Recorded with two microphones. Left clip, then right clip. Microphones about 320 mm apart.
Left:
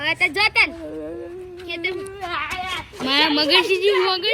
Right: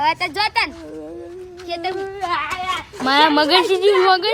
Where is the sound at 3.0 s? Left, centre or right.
Centre.